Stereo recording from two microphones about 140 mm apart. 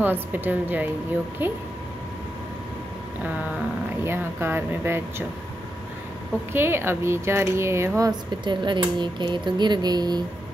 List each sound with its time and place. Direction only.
0.0 s speech: 15° right (ahead or behind)
4.0 s speech: 15° right (ahead or behind)
6.5 s speech: 15° right (ahead or behind)
8.1 s speech: 35° right (ahead or behind)